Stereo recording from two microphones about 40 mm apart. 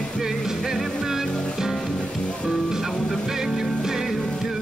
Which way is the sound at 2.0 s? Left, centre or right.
Left.